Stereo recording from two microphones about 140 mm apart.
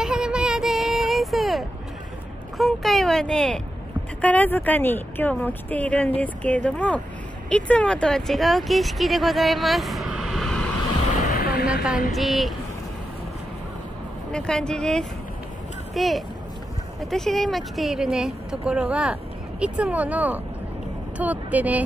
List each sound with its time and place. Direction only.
0.0 s child singing: 5° right (ahead or behind)
2.5 s a woman's voice: centre (ahead or behind)
11.2 s a sound: 90° left
12.1 s speech: centre (ahead or behind)
14.3 s speech: 5° left (ahead or behind); by 21.8 s 10° right (ahead or behind)